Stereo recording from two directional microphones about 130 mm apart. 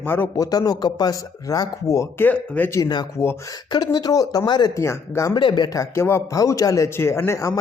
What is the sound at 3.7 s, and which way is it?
Speech, 30° left (ahead or behind).